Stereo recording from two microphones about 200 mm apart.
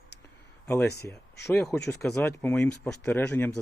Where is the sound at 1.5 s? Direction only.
10° left (ahead or behind).